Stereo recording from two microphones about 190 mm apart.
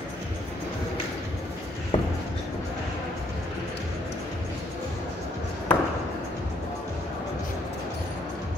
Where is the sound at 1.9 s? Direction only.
30° left (ahead or behind).